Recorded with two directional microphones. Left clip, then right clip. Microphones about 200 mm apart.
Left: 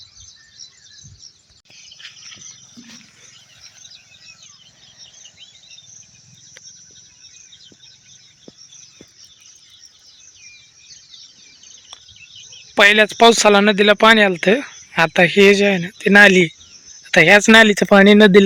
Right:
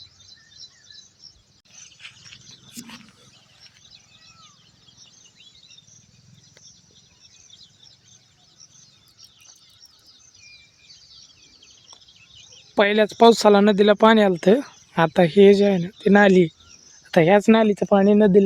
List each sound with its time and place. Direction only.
12.7 s speech: 5° right (ahead or behind)
17.7 s speech: 15° left (ahead or behind)